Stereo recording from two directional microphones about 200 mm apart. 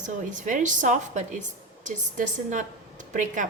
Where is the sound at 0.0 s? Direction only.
40° right (ahead or behind).